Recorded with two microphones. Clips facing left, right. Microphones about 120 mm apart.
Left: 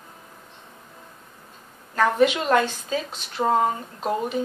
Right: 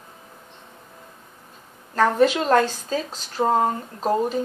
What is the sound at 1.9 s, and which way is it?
Speech, 40° right (ahead or behind).